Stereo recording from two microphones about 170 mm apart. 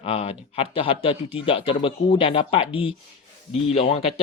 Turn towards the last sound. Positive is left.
turn(degrees=35)  # may be behind; listen again after turning